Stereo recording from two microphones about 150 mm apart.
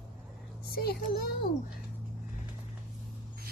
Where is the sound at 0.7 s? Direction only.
90° left.